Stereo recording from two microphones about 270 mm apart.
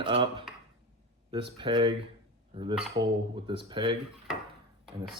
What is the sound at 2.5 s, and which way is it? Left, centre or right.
Dishes, centre.